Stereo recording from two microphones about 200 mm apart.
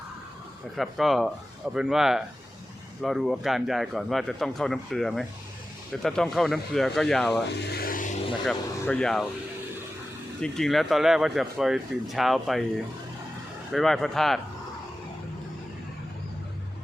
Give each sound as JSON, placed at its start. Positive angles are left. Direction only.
{"t": 0.8, "sound": "speech", "side_deg": 0}
{"t": 7.7, "sound": "a sound", "side_deg": 45}
{"t": 8.4, "sound": "speech", "side_deg": 5}
{"t": 10.4, "sound": "speech", "side_deg": 0}
{"t": 13.7, "sound": "speech", "side_deg": 0}